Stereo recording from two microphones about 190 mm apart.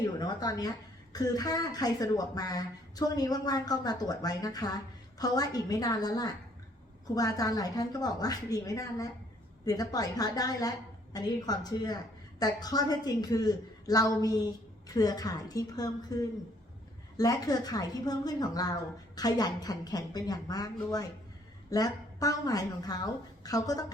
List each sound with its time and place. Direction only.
0.0 s a woman's voice: 20° left (ahead or behind)